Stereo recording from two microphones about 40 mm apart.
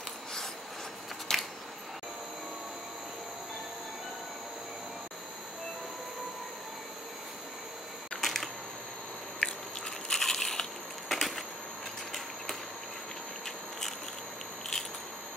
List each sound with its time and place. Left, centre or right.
1.3 s a sound: centre
8.2 s camera: centre
9.4 s biting: left
10.0 s crushing: centre